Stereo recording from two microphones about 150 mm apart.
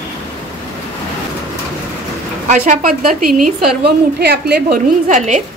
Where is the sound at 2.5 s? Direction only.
55° right (ahead or behind).